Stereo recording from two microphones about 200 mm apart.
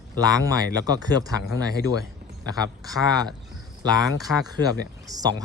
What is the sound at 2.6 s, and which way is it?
Speech, 20° right (ahead or behind).